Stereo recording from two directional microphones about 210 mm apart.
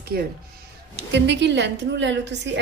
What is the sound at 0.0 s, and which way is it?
A woman's voice, 45° right (ahead or behind).